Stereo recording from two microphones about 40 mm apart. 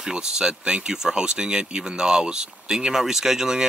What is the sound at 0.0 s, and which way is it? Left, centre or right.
Speech, centre.